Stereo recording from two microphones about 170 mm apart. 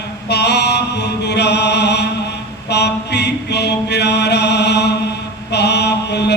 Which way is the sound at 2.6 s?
80° left.